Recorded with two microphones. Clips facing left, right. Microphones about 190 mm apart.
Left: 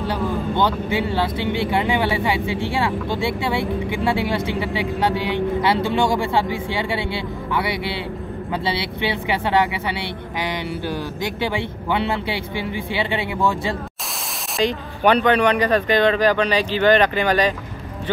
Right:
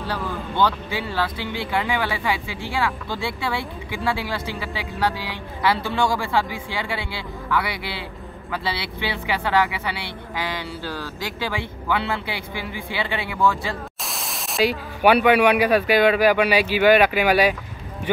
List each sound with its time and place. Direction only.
0.1 s speech: 20° left (ahead or behind)
14.6 s speech: 5° right (ahead or behind)